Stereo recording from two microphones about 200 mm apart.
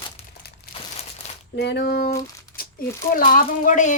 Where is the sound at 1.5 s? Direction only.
55° left (ahead or behind).